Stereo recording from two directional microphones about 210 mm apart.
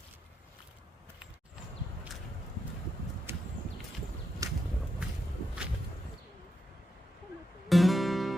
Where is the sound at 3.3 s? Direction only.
10° right (ahead or behind).